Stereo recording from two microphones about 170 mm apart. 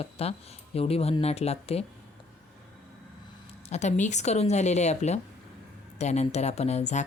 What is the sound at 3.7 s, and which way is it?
A woman's voice, 45° left (ahead or behind).